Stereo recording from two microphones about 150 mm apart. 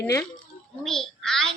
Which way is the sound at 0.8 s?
5° left (ahead or behind).